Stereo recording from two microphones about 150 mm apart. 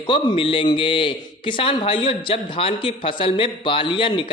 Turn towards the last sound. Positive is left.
turn(degrees=35)  # may be behind; listen again after turning